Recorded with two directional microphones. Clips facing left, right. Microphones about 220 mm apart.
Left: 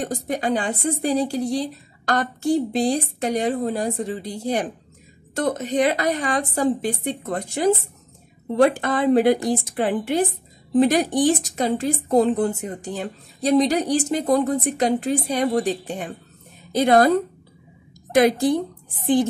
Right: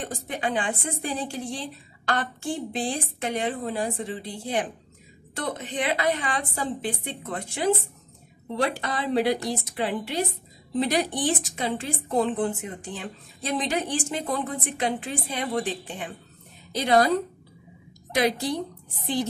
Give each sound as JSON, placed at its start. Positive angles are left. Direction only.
{"t": 0.0, "sound": "a woman's voice", "side_deg": 40}